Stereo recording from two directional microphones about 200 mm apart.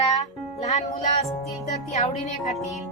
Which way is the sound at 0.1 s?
35° left (ahead or behind).